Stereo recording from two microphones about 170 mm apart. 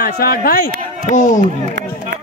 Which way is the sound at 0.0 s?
60° left (ahead or behind).